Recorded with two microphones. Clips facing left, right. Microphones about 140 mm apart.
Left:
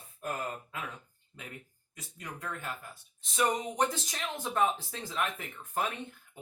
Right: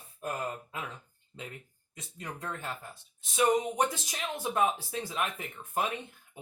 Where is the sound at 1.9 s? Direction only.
25° right (ahead or behind).